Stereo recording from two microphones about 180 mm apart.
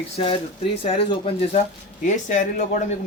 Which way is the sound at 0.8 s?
30° left (ahead or behind).